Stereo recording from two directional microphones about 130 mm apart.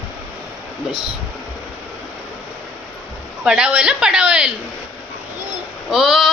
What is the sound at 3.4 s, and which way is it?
A woman's voice, 5° right (ahead or behind).